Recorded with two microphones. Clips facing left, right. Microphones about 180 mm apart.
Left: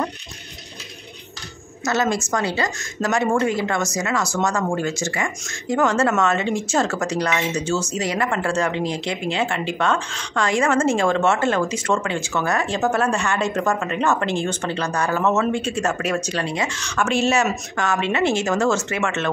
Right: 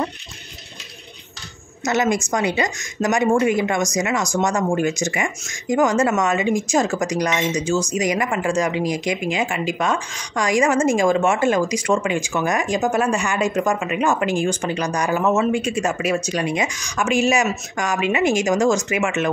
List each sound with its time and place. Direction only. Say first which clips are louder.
1.9 s speech: right 2 dB; 15° right (ahead or behind)